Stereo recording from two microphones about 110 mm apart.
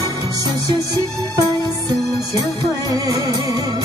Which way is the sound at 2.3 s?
35° right (ahead or behind).